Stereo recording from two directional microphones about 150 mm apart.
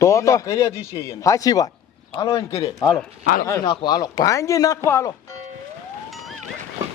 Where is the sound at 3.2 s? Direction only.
70° left (ahead or behind).